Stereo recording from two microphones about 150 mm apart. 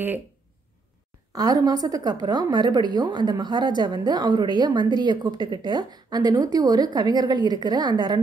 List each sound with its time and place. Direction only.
1.3 s a woman's voice: 25° right (ahead or behind)